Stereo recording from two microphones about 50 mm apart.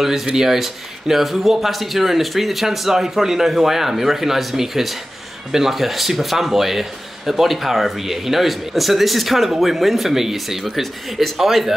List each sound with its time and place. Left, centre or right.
0.0 s speech: centre